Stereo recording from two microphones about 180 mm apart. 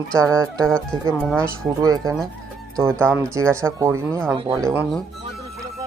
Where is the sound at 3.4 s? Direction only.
15° right (ahead or behind).